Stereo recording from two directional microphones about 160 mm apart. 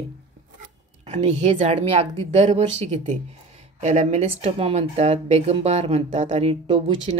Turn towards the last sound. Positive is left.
turn(degrees=-35)  # may be behind; listen again after turning